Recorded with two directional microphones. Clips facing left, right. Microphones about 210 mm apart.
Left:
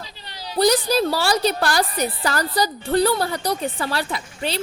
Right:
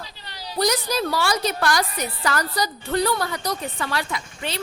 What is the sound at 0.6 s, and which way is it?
A woman's voice, 30° left (ahead or behind).